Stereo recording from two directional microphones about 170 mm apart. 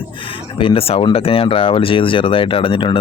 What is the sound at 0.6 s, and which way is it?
Speech, 35° left (ahead or behind).